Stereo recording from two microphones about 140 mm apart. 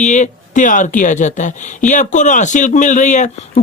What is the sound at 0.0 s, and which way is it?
Speech, 60° left (ahead or behind).